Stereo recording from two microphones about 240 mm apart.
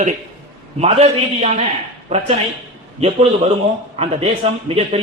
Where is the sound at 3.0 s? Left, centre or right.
Right.